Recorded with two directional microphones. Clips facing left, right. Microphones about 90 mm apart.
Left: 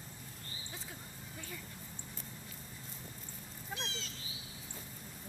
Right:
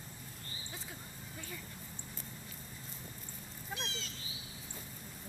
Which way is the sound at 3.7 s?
30° left (ahead or behind).